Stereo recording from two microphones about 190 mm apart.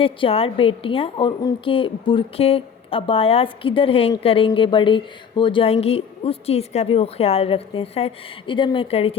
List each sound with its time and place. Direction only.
0.0 s a woman's voice: 30° left (ahead or behind)